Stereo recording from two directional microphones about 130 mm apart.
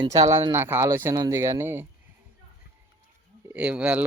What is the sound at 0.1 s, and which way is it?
Speech, 25° right (ahead or behind).